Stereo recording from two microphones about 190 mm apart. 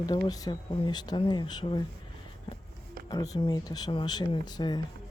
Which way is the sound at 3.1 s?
20° left (ahead or behind).